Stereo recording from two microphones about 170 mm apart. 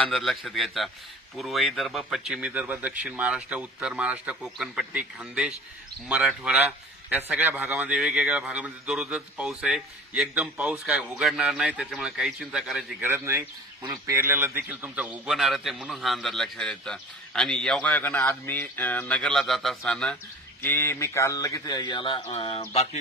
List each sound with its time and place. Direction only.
0.1 s a man's voice: centre (ahead or behind); by 22.8 s 35° left (ahead or behind)